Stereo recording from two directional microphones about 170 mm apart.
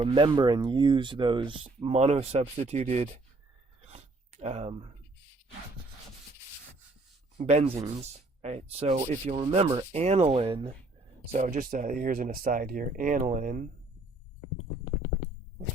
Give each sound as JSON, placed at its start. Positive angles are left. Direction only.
{"t": 0.0, "sound": "speech", "side_deg": -30}
{"t": 3.8, "sound": "a sound", "side_deg": -40}
{"t": 7.3, "sound": "speech", "side_deg": -40}
{"t": 9.6, "sound": "speech", "side_deg": -15}
{"t": 9.9, "sound": "speech", "side_deg": -40}